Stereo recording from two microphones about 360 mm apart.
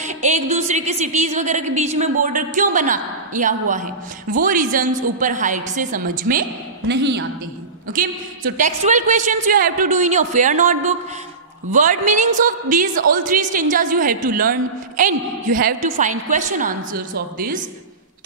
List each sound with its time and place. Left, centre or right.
0.0 s a woman's voice: centre
8.5 s a woman's voice: centre